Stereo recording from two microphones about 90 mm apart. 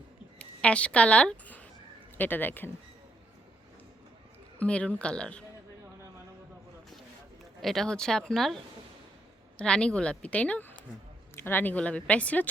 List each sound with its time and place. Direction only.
0.3 s a sound: 10° left (ahead or behind)
2.1 s speech: 20° left (ahead or behind)
4.6 s speech: 15° left (ahead or behind)
7.6 s speech: centre (ahead or behind)
9.6 s speech: 10° left (ahead or behind)